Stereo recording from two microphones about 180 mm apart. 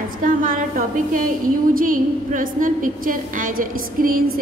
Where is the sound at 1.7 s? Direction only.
50° right (ahead or behind).